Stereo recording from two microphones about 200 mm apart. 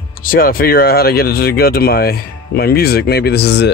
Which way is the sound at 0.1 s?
45° left (ahead or behind).